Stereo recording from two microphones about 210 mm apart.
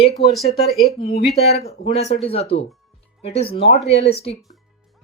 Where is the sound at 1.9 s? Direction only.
30° left (ahead or behind).